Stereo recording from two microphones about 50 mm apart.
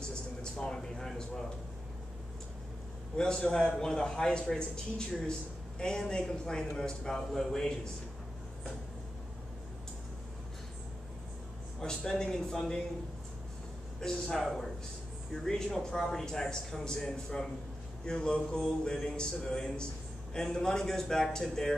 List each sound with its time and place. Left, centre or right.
0.0 s a sound: centre
3.2 s a man's voice: centre
11.8 s a man's voice: centre
13.9 s a man's voice: centre